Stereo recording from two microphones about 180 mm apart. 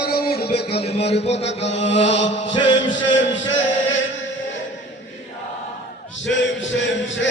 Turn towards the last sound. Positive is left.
turn(degrees=90)